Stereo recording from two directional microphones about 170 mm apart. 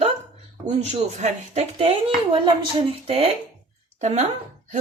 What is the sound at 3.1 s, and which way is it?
Speech, 35° right (ahead or behind).